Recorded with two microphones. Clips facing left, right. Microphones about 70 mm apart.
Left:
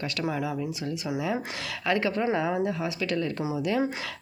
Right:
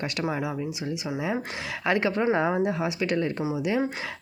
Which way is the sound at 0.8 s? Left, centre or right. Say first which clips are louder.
Even; centre.